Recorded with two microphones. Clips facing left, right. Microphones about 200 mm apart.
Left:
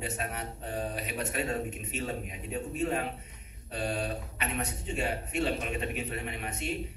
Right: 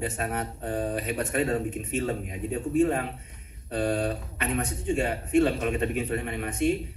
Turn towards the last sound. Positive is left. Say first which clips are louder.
# right 10 dB
turn(degrees=-50)  # may be behind; listen again after turning